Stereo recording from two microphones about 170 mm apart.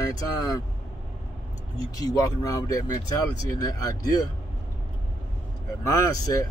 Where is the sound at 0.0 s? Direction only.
20° left (ahead or behind).